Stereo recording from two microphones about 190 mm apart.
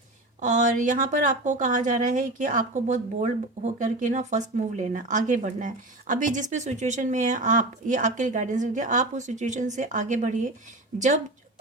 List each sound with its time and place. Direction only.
0.3 s speech: 40° right (ahead or behind)